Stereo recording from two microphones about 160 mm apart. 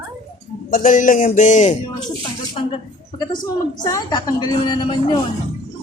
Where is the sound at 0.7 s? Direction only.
55° left (ahead or behind).